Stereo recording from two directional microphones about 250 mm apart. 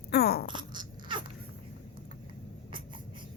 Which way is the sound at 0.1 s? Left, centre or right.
Left.